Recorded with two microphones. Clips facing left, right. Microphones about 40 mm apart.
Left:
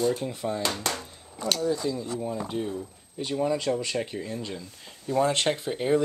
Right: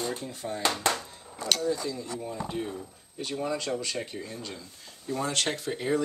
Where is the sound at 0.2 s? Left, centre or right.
Left.